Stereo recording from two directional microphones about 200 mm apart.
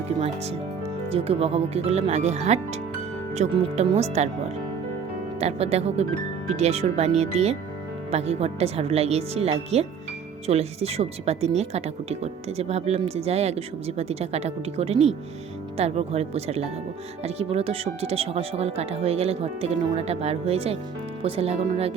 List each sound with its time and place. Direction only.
1.1 s speech: 30° right (ahead or behind)
5.4 s speech: 30° right (ahead or behind)